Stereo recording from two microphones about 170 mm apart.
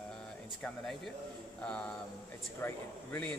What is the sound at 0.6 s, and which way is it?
Speech, centre (ahead or behind).